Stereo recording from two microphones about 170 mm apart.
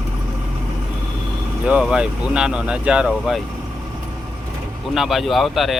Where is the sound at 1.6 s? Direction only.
5° right (ahead or behind).